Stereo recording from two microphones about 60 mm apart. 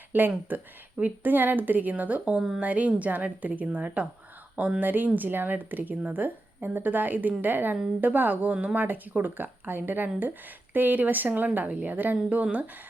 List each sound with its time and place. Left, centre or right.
0.1 s speech: right
2.3 s speech: centre
2.6 s speech: right